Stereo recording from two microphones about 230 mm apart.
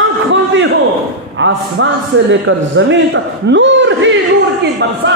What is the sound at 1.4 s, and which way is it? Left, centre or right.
A man's voice, right.